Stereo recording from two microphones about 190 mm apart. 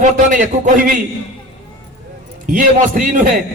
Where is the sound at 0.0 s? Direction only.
40° right (ahead or behind).